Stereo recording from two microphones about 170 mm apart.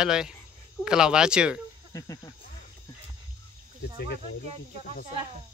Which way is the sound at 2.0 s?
20° left (ahead or behind).